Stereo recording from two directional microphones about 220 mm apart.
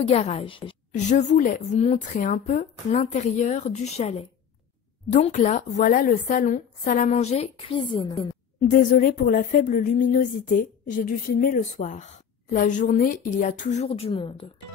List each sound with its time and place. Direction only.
0.0 s speech: 30° left (ahead or behind)
8.5 s speech: 35° left (ahead or behind)